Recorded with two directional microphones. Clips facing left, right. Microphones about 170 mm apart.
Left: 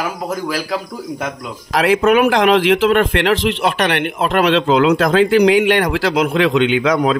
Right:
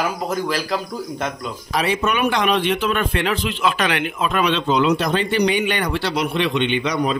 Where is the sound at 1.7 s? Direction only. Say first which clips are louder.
Left 8 dB; 90° left.